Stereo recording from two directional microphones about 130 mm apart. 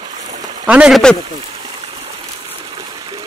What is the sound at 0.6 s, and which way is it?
Speech, 10° right (ahead or behind).